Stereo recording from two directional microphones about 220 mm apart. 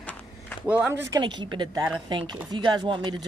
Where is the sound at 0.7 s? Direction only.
5° right (ahead or behind).